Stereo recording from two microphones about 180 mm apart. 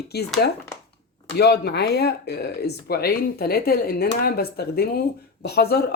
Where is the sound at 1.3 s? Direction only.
65° left (ahead or behind).